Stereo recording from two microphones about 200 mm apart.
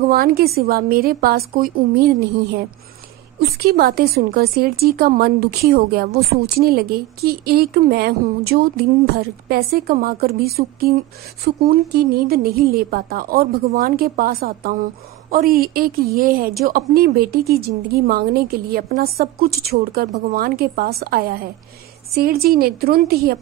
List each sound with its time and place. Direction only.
0.1 s a woman's voice: 50° right (ahead or behind)